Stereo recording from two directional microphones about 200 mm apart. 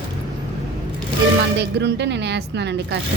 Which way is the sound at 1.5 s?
60° right (ahead or behind).